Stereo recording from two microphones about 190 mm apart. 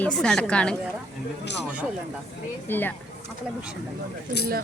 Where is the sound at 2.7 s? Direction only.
10° left (ahead or behind).